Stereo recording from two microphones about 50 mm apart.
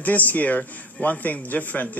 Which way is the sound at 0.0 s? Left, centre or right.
Left.